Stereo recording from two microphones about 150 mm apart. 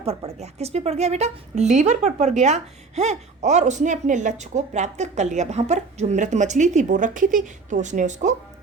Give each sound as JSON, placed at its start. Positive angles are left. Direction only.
{"t": 0.0, "sound": "speech", "side_deg": -40}